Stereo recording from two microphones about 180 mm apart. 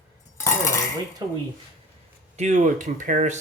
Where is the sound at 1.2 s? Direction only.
20° right (ahead or behind).